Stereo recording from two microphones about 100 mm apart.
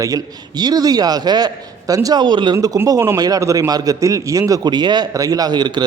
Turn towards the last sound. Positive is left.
turn(degrees=-45)  # may be behind; listen again after turning